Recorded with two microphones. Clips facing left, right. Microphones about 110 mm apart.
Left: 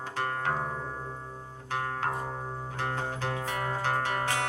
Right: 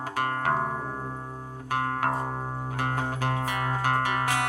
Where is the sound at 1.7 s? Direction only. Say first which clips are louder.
Right 4 dB; 55° right (ahead or behind).